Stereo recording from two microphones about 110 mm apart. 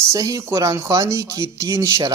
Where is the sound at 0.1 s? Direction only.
30° right (ahead or behind).